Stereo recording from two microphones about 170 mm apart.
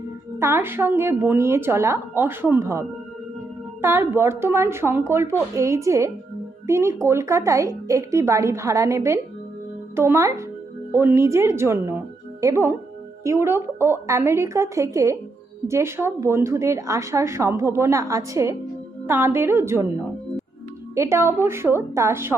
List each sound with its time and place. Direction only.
0.3 s a woman's voice: 15° right (ahead or behind)